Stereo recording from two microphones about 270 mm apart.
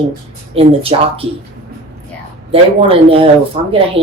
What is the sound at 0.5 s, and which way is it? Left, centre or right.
Speech, right.